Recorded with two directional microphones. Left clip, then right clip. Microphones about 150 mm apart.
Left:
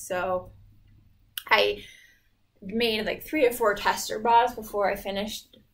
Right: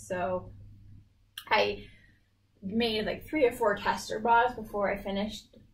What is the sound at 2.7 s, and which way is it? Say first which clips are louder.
A woman's voice: left 4 dB; 40° left (ahead or behind).